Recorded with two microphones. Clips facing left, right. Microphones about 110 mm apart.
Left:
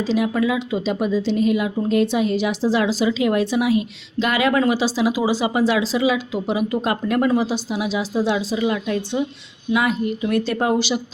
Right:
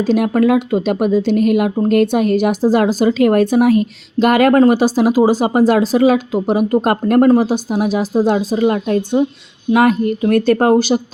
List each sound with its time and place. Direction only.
0.1 s speech: 55° right (ahead or behind)